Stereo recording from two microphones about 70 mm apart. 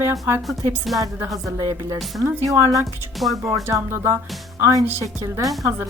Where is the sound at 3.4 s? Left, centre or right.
Right.